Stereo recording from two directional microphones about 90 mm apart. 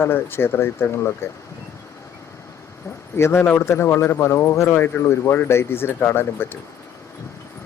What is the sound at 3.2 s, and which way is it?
Speech, 30° left (ahead or behind).